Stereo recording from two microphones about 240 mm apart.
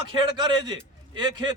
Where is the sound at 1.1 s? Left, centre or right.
Centre.